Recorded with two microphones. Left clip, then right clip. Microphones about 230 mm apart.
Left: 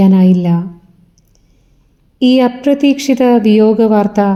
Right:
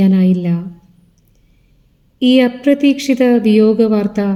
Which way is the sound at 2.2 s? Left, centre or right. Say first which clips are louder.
Left 1 dB; centre.